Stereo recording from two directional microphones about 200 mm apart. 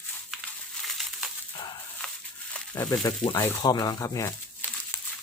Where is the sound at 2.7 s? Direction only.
15° left (ahead or behind).